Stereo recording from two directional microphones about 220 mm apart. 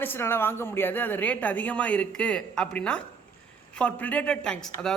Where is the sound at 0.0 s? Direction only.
10° left (ahead or behind).